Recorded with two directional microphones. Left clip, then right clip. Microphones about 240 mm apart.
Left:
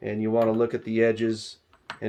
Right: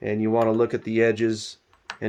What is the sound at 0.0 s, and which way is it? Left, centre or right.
Speech, right.